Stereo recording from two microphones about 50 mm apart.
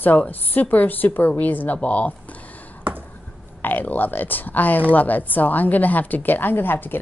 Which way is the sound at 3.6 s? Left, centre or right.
Left.